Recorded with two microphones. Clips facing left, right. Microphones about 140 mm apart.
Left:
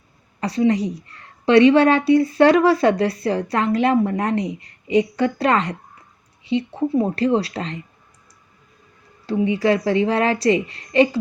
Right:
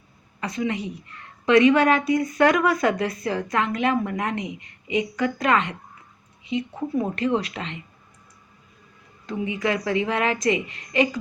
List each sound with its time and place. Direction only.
0.3 s a woman's voice: 35° left (ahead or behind)
9.2 s a woman's voice: 35° left (ahead or behind)